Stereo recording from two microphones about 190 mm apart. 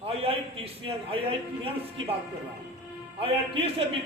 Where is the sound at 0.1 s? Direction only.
30° right (ahead or behind).